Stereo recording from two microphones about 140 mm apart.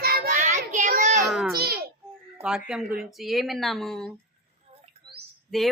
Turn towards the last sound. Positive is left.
turn(degrees=0)  # may be behind; listen again after turning